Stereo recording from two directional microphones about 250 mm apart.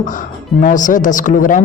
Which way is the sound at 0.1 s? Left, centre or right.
Left.